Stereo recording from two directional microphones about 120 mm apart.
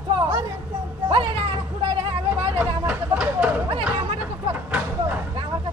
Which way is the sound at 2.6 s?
10° right (ahead or behind).